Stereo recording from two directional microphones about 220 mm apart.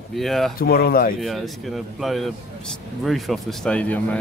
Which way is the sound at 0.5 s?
45° left (ahead or behind).